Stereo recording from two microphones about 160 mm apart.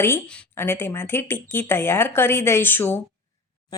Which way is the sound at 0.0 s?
10° left (ahead or behind).